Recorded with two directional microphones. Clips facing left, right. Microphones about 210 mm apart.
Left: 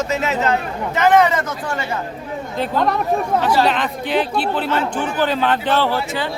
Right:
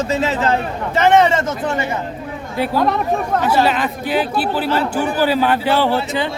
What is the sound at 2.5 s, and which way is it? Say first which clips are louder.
Speech: right 2 dB; 5° right (ahead or behind).